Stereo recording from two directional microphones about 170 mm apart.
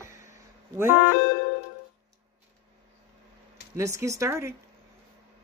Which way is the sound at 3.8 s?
20° right (ahead or behind).